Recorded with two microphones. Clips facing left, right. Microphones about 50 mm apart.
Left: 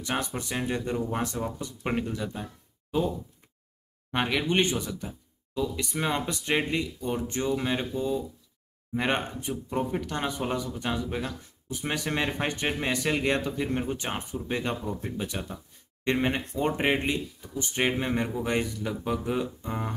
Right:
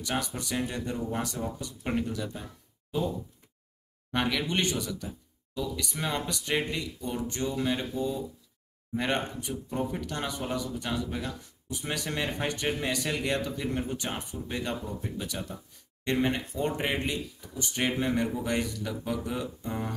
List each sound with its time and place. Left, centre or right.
0.0 s speech: left
4.1 s speech: left